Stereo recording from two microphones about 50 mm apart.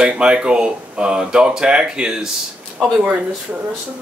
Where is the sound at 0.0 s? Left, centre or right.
Right.